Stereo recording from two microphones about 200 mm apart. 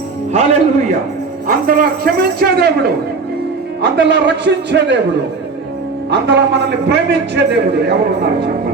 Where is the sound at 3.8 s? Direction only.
55° right (ahead or behind).